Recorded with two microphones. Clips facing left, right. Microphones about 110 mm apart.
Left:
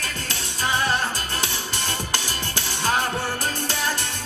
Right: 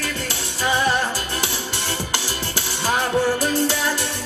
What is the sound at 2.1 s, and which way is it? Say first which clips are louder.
Music: right 2 dB; 15° right (ahead or behind).